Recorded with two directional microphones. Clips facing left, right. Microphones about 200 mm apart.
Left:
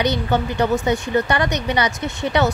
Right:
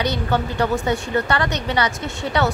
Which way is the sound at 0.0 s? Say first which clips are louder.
Left 2 dB; 20° left (ahead or behind).